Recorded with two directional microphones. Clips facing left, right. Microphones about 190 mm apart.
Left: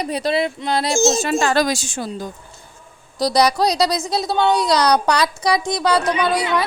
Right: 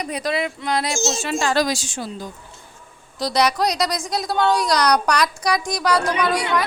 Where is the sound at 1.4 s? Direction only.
55° left (ahead or behind).